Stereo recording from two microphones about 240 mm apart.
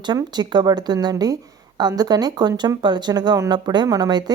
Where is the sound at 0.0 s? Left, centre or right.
Centre.